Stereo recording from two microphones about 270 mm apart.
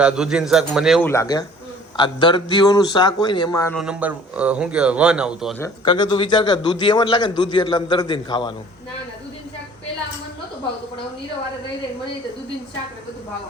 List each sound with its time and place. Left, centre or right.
0.0 s speech: centre
1.1 s a man's voice: centre
3.8 s speech: centre
5.6 s a man's voice: centre